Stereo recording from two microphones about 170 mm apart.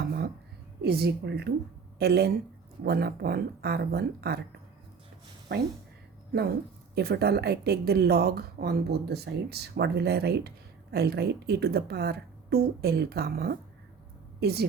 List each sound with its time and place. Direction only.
0.8 s speech: 70° right (ahead or behind)
6.9 s speech: 70° right (ahead or behind)